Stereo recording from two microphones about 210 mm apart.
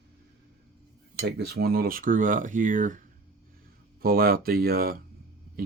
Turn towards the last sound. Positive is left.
turn(degrees=-45)  # may be behind; listen again after turning